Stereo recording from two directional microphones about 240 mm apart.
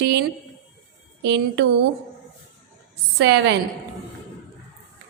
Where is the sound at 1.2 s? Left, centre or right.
Right.